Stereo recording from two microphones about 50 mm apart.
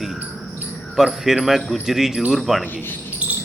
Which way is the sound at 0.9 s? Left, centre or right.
Centre.